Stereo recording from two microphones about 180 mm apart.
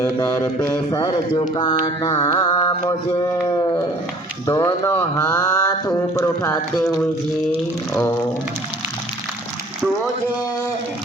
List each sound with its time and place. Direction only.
0.0 s mantra: 15° left (ahead or behind)
2.2 s a sound: 25° left (ahead or behind)
4.4 s mantra: 20° left (ahead or behind)